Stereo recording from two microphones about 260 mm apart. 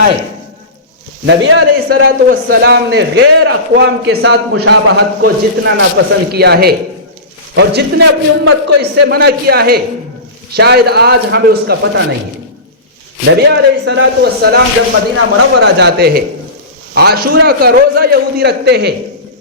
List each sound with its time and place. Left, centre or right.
1.2 s a man's voice: right
13.3 s a man's voice: right